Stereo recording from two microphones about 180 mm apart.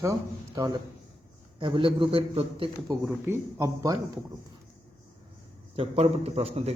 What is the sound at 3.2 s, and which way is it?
Speech, 15° right (ahead or behind).